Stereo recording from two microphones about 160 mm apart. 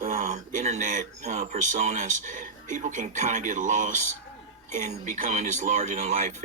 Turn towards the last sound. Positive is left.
turn(degrees=-45)  # may be behind; listen again after turning